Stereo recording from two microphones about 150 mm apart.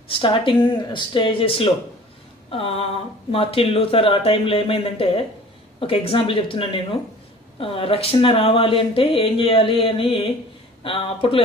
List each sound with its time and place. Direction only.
0.1 s speech: 35° left (ahead or behind)